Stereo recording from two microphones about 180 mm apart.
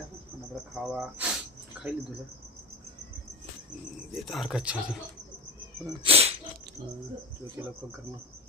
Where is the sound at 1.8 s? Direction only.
5° right (ahead or behind).